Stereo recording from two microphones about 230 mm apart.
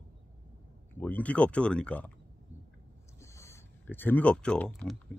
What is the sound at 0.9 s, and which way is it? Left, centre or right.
Speech, centre.